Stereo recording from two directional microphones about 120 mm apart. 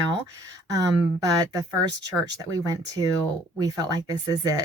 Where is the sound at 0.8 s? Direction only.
30° right (ahead or behind).